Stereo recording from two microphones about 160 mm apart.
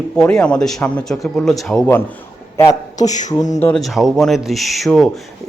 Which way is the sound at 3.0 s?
50° left (ahead or behind).